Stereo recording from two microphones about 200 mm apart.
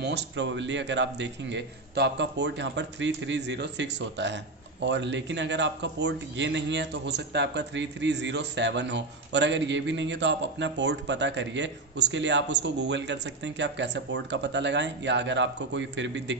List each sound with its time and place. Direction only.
0.0 s a man's voice: 60° right (ahead or behind)